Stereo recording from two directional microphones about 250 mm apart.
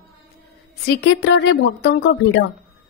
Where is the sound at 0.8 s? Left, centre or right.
Left.